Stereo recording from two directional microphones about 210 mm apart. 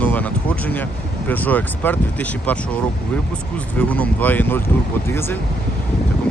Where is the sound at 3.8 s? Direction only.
5° left (ahead or behind).